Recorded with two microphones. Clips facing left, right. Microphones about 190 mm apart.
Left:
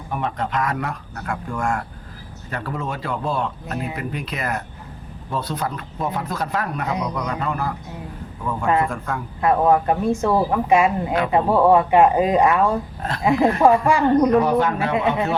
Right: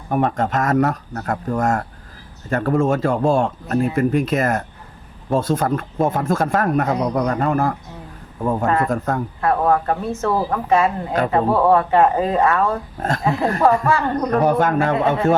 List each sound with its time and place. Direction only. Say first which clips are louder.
0.1 s speech: right 6 dB; 45° right (ahead or behind)
9.4 s a woman's voice: left 2 dB; 15° left (ahead or behind)
13.0 s speech: right 5 dB; 45° right (ahead or behind)
13.2 s a woman's voice: left 2 dB; 15° left (ahead or behind)
14.4 s speech: right 3 dB; 50° right (ahead or behind)